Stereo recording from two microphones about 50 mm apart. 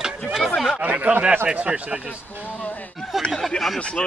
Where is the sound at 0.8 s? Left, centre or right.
Right.